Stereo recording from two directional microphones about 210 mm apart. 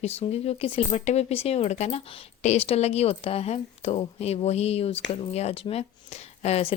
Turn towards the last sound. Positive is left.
turn(degrees=30)  # may be behind; listen again after turning